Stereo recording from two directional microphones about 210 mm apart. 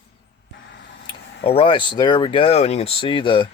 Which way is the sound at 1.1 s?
25° left (ahead or behind).